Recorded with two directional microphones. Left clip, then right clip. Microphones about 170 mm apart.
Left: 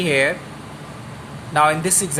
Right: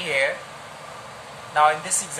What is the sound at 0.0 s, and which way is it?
Speech, 60° left (ahead or behind).